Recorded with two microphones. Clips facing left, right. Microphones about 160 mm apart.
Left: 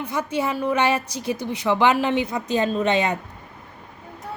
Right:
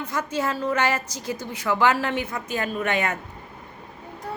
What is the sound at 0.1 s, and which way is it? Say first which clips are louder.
A woman's voice: left 2 dB; 15° left (ahead or behind).